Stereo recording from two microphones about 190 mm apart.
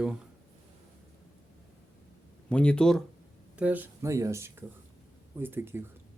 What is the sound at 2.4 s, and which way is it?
Speech, 5° left (ahead or behind).